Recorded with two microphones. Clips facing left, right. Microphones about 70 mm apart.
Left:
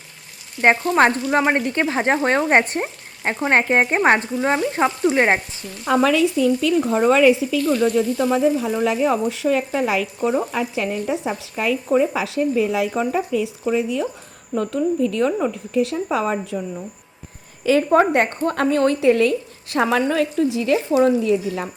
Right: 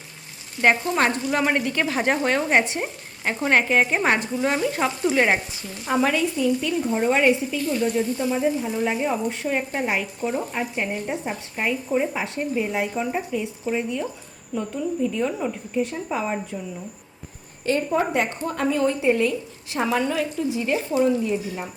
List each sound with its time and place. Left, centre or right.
0.6 s speech: left
5.9 s speech: left
14.5 s a woman's voice: left
15.0 s speech: left
17.7 s a woman's voice: left